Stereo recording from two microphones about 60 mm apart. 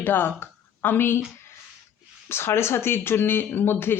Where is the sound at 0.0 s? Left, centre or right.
Left.